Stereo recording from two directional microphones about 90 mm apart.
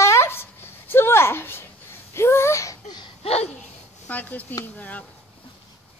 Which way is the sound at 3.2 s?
90° left.